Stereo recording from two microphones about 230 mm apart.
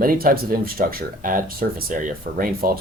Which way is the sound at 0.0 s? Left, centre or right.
Right.